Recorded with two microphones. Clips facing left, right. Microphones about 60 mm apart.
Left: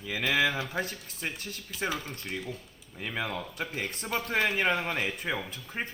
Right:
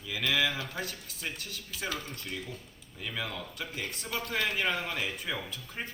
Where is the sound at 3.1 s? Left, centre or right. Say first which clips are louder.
Left 4 dB; left.